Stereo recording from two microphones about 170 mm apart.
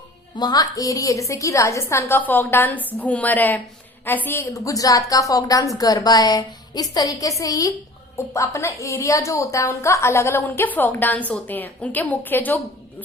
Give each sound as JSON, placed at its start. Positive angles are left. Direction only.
{"t": 0.3, "sound": "a woman's voice", "side_deg": 25}